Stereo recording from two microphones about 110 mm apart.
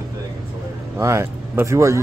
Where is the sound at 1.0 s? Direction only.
25° right (ahead or behind).